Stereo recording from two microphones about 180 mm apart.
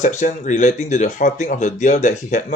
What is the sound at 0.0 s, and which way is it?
Speech, 40° left (ahead or behind).